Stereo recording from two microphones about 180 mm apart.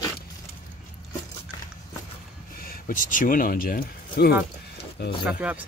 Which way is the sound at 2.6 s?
50° left (ahead or behind).